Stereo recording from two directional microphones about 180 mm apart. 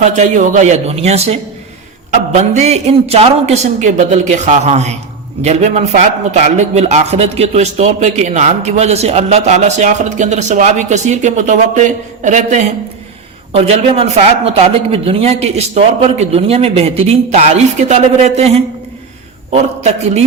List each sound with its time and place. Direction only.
0.0 s a man's voice: 40° right (ahead or behind)